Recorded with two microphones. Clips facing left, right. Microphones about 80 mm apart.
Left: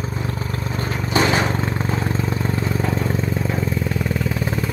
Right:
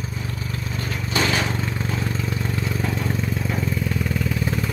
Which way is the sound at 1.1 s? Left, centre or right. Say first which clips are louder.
Left 4 dB; left.